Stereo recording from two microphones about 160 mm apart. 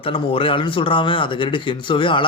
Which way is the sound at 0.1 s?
35° left (ahead or behind).